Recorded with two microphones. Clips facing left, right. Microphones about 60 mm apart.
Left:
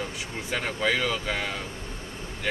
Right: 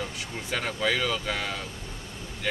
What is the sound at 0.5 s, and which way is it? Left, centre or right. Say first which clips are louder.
Speech: left 1 dB; centre.